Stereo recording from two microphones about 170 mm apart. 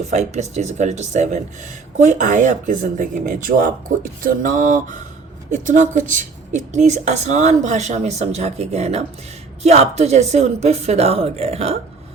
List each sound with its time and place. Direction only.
0.1 s a woman's voice: 40° right (ahead or behind)